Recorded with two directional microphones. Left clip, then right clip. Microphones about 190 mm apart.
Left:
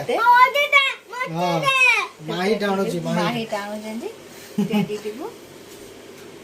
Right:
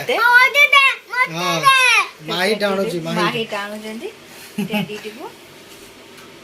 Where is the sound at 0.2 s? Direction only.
10° left (ahead or behind).